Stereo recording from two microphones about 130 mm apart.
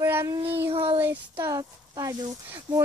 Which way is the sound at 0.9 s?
15° right (ahead or behind).